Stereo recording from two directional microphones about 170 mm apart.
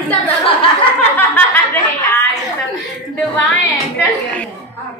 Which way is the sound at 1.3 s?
10° left (ahead or behind).